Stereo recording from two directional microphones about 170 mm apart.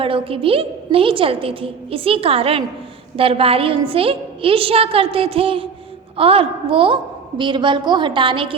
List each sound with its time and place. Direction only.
0.0 s a woman's voice: 30° right (ahead or behind)